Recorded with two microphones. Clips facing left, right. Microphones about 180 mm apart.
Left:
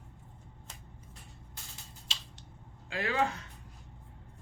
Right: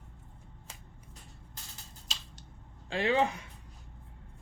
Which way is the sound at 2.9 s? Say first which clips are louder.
Right 3 dB; 25° right (ahead or behind).